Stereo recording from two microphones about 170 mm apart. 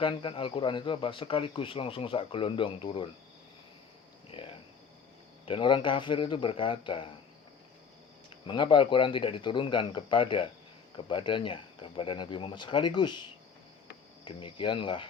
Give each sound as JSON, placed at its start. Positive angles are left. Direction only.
{"t": 0.0, "sound": "speech", "side_deg": 30}
{"t": 5.5, "sound": "speech", "side_deg": 30}
{"t": 8.4, "sound": "speech", "side_deg": 30}
{"t": 14.3, "sound": "speech", "side_deg": 30}